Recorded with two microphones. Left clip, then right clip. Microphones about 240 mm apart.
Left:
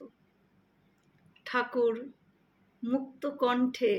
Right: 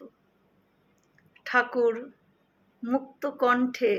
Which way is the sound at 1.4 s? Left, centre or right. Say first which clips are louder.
Right 7 dB; left.